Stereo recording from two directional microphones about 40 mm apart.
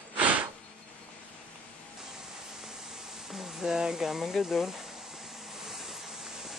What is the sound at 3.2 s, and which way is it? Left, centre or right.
Speech, centre.